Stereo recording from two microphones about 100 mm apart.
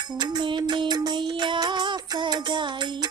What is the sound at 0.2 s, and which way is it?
Music, 50° right (ahead or behind).